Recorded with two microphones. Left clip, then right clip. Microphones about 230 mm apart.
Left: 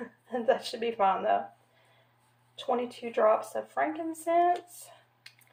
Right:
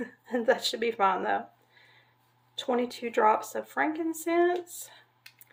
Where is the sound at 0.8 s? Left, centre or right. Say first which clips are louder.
Right 1 dB; right.